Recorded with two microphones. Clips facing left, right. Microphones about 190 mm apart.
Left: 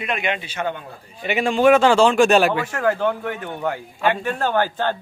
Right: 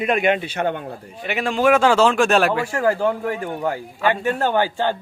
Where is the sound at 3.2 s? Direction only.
35° right (ahead or behind).